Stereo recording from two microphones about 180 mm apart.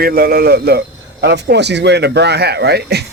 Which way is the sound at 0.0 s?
55° right (ahead or behind).